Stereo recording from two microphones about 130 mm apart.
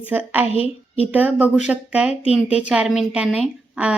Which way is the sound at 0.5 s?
45° left (ahead or behind).